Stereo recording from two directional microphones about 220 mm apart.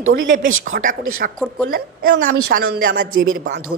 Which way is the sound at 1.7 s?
45° right (ahead or behind).